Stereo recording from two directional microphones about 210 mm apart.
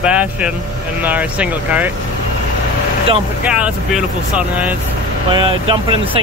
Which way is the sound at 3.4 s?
5° right (ahead or behind).